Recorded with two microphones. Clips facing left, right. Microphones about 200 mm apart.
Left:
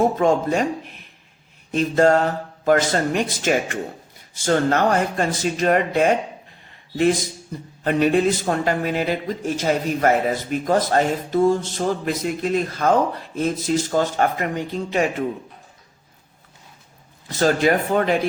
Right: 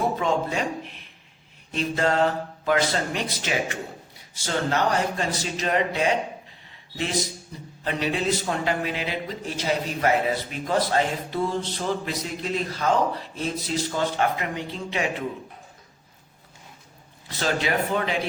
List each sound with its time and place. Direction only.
0.0 s a man's voice: 45° left (ahead or behind)
1.7 s a man's voice: 45° left (ahead or behind)
17.2 s a man's voice: 45° left (ahead or behind)